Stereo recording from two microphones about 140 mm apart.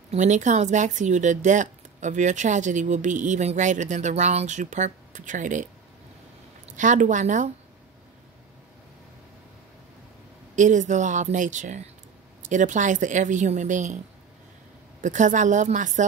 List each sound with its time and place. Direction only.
0.1 s speech: 60° right (ahead or behind)
6.8 s speech: 65° right (ahead or behind)
10.5 s speech: 60° right (ahead or behind)
15.0 s speech: 60° right (ahead or behind)